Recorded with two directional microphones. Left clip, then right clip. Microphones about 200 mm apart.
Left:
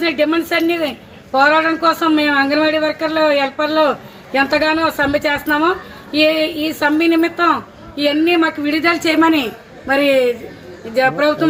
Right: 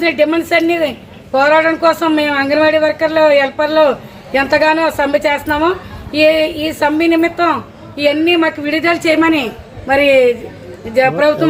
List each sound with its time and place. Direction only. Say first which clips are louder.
0.0 s a woman's voice: right 3 dB; centre (ahead or behind)